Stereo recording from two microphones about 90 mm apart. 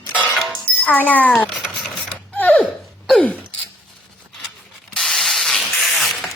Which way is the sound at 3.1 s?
15° left (ahead or behind).